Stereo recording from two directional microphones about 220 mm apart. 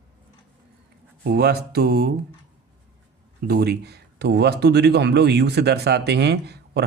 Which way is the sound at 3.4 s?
45° right (ahead or behind).